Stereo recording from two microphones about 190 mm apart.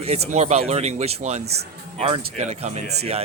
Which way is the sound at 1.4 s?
60° right (ahead or behind).